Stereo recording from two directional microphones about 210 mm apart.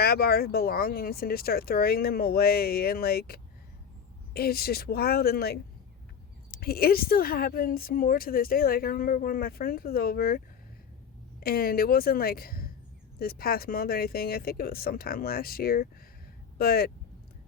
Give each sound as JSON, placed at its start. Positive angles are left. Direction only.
{"t": 0.0, "sound": "speech", "side_deg": 45}
{"t": 11.4, "sound": "speech", "side_deg": 45}